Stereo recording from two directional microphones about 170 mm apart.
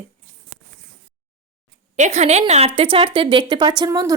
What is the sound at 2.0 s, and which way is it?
A woman's voice, 40° right (ahead or behind).